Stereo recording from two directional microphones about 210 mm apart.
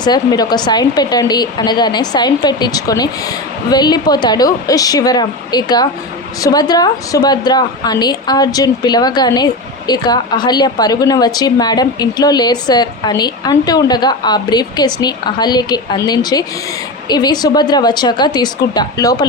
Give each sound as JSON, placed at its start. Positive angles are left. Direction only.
{"t": 0.0, "sound": "a woman's voice", "side_deg": 20}